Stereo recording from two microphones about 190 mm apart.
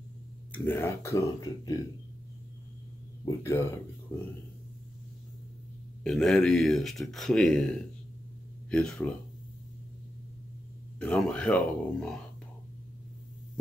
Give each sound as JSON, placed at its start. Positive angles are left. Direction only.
{"t": 0.5, "sound": "speech", "side_deg": 10}
{"t": 3.3, "sound": "speech", "side_deg": 15}
{"t": 6.0, "sound": "speech", "side_deg": 5}
{"t": 11.0, "sound": "speech", "side_deg": 5}